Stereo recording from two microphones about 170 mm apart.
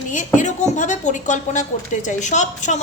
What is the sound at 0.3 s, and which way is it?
A woman's voice, 45° left (ahead or behind).